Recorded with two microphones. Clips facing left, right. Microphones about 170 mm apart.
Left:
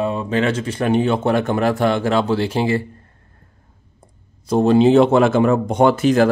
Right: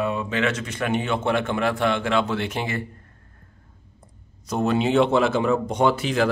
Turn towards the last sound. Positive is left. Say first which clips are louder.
# left 7 dB
turn(degrees=45)  # may be behind; listen again after turning